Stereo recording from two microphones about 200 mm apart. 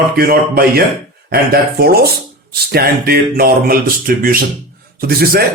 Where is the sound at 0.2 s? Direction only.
50° right (ahead or behind).